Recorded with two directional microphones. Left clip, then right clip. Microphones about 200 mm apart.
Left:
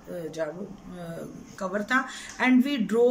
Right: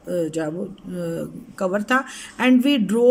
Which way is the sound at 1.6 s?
50° right (ahead or behind).